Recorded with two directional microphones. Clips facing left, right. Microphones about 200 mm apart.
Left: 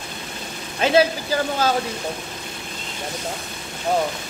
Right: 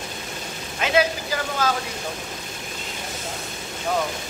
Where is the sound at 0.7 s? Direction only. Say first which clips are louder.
Left 4 dB; 30° left (ahead or behind).